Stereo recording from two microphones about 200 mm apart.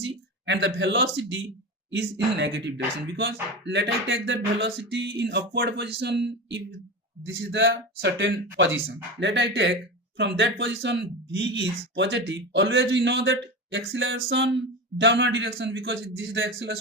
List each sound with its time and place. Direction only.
0.0 s speech: 65° right (ahead or behind)
1.9 s a sound: 60° right (ahead or behind)
12.8 s speech: 65° right (ahead or behind)